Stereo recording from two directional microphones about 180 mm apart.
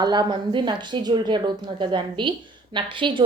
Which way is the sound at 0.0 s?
25° right (ahead or behind).